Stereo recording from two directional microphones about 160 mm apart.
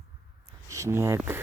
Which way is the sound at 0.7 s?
20° right (ahead or behind).